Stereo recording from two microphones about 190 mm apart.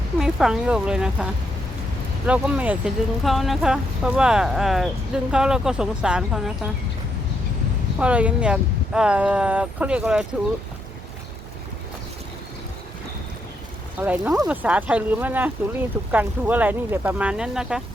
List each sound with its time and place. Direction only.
0.2 s speech: centre (ahead or behind)
7.9 s speech: 5° right (ahead or behind)
14.0 s speech: 10° right (ahead or behind)